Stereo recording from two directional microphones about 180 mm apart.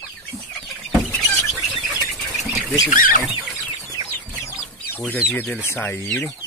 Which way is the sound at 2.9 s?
50° left (ahead or behind).